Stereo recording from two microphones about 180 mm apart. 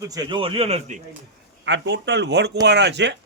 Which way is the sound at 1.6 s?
75° right (ahead or behind).